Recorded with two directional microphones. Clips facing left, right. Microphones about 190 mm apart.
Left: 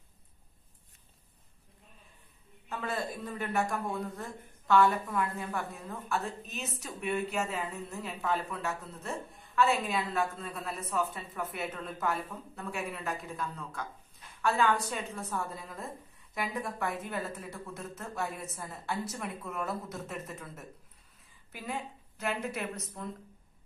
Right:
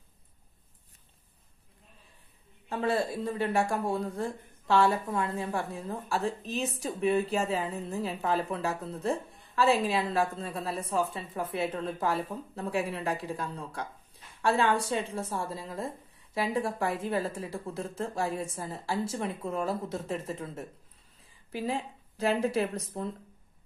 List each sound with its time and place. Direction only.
2.7 s a woman's voice: 30° right (ahead or behind)